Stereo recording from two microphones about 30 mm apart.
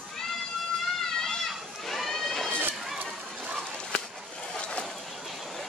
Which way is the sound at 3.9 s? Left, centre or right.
Left.